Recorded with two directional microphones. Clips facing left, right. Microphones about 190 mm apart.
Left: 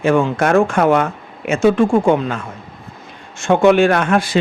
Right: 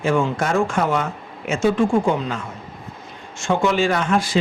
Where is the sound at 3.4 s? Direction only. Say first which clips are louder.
Left 7 dB; 60° left (ahead or behind).